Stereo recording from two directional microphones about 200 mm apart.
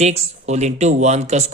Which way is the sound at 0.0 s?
35° right (ahead or behind).